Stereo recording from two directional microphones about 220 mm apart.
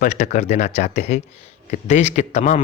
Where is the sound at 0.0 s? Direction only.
35° left (ahead or behind).